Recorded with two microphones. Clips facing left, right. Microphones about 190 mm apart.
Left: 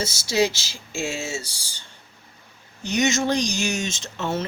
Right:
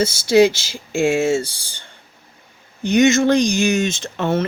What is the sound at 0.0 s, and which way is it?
Speech, 55° right (ahead or behind).